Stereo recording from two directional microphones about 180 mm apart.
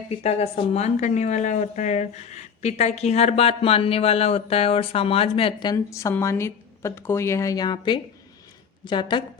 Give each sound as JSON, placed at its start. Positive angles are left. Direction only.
{"t": 0.1, "sound": "a woman's voice", "side_deg": 35}